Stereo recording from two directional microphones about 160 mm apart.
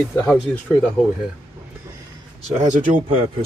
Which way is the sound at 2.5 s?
50° right (ahead or behind).